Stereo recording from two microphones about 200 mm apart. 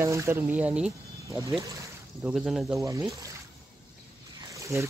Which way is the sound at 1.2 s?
15° right (ahead or behind).